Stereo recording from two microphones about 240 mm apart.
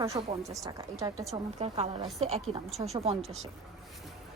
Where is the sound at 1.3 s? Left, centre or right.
Right.